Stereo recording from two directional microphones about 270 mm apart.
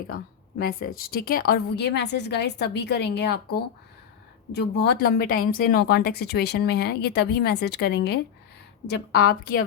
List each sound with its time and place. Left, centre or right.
1.1 s speech: left